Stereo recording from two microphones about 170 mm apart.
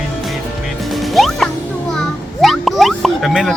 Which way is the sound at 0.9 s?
Centre (ahead or behind).